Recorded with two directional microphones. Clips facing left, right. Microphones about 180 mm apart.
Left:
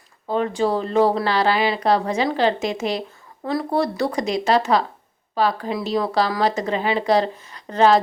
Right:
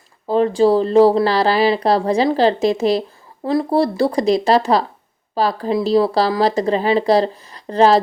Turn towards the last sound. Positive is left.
turn(degrees=-35)  # may be behind; listen again after turning